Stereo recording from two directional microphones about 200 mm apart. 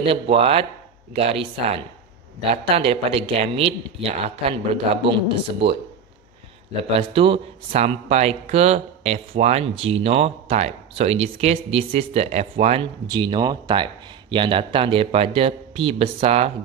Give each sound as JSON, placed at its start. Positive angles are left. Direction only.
{"t": 0.0, "sound": "speech", "side_deg": -30}
{"t": 6.8, "sound": "speech", "side_deg": -30}